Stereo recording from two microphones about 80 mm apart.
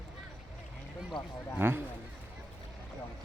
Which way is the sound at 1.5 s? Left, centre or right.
Right.